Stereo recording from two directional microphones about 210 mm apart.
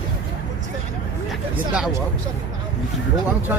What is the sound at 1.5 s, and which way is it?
Speech, 5° right (ahead or behind).